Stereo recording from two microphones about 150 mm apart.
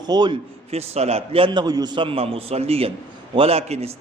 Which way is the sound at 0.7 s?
45° right (ahead or behind).